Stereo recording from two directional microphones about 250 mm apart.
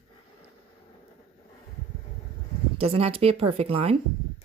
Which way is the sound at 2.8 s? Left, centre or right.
Right.